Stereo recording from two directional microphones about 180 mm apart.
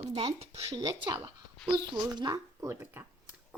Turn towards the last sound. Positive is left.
turn(degrees=-15)  # may be behind; listen again after turning